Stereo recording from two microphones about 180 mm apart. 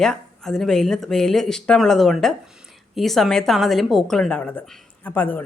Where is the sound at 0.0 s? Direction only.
5° left (ahead or behind).